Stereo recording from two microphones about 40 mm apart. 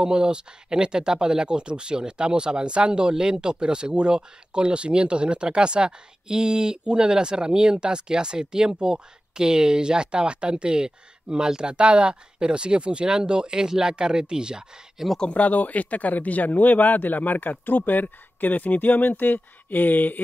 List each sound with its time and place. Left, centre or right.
0.0 s speech: right
15.3 s speech: left